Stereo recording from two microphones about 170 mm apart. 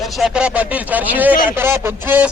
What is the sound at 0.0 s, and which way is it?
Speech, centre (ahead or behind).